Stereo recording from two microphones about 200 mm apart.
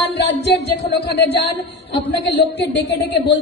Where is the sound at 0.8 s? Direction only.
55° left (ahead or behind).